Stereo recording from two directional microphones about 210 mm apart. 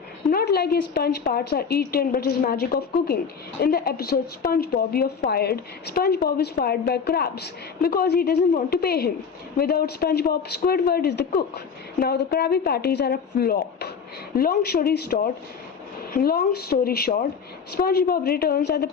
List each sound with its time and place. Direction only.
0.3 s a woman's voice: 45° left (ahead or behind)